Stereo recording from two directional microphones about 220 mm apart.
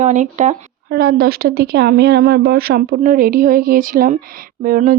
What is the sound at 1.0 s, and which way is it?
Speech, 45° right (ahead or behind).